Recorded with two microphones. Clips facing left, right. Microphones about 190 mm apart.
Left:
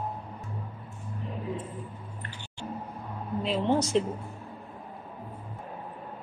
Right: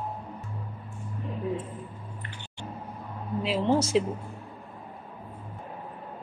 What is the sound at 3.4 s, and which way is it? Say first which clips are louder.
Speech: right 1 dB; centre (ahead or behind).